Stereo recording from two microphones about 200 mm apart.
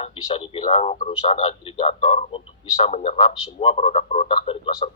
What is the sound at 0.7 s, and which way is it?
Speech, 35° left (ahead or behind).